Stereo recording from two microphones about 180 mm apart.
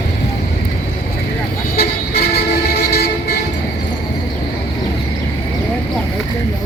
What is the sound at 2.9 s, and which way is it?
Vehicle, 60° left (ahead or behind).